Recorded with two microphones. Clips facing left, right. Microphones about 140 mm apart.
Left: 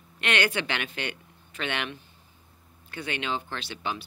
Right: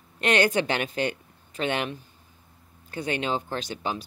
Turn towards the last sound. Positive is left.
turn(degrees=-40)  # may be behind; listen again after turning